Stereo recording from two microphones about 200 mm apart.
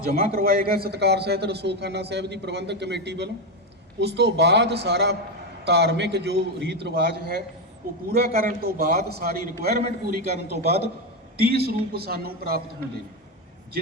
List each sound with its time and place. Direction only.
0.3 s a man's voice: 50° right (ahead or behind)